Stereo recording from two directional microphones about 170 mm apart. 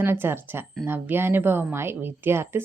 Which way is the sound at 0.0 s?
15° right (ahead or behind).